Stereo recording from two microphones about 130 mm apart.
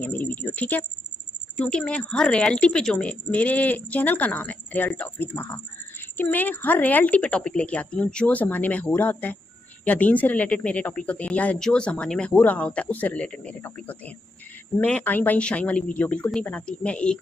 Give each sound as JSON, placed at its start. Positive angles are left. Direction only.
{"t": 0.0, "sound": "a woman's voice", "side_deg": 10}